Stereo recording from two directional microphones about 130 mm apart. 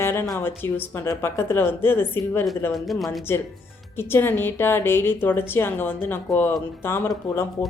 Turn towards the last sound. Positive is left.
turn(degrees=20)  # may be behind; listen again after turning